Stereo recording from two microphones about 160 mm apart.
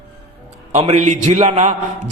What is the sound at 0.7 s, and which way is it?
A man's voice, 45° right (ahead or behind).